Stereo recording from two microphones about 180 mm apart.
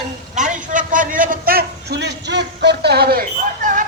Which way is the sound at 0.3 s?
45° right (ahead or behind).